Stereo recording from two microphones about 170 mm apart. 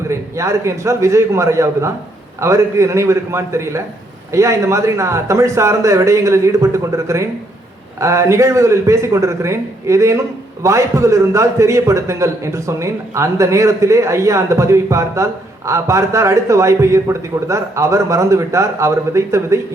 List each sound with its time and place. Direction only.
0.1 s a man's voice: 15° right (ahead or behind)